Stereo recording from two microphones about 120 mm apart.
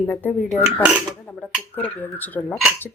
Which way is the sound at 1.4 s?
10° left (ahead or behind).